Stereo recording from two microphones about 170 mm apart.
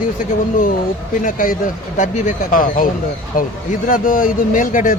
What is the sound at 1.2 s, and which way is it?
Speech, 55° left (ahead or behind).